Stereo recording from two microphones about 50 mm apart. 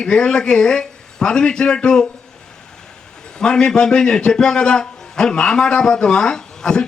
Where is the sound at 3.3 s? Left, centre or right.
Centre.